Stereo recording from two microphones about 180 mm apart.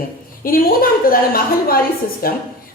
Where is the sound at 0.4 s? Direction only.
55° left (ahead or behind).